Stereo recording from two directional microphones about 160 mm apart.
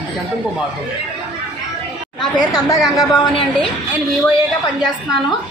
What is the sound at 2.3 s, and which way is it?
A woman's voice, 25° left (ahead or behind).